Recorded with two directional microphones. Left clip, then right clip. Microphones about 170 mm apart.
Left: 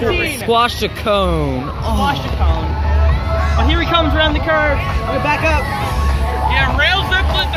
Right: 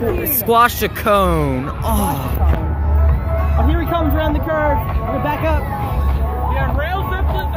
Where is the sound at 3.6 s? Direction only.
70° right (ahead or behind).